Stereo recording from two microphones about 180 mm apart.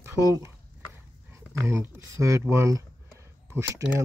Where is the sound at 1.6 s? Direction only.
15° right (ahead or behind).